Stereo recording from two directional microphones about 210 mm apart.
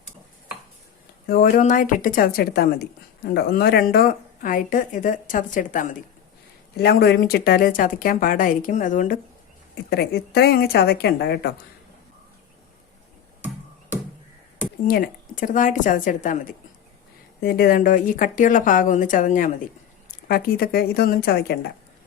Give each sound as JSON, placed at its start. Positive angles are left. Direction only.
{"t": 1.3, "sound": "a woman's voice", "side_deg": 45}
{"t": 6.7, "sound": "a woman's voice", "side_deg": 50}
{"t": 9.9, "sound": "speech", "side_deg": 50}
{"t": 14.8, "sound": "a woman's voice", "side_deg": 45}